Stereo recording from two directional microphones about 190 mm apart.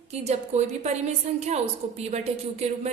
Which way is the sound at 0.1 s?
35° right (ahead or behind).